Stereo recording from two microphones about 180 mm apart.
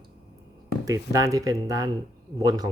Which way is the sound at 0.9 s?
20° right (ahead or behind).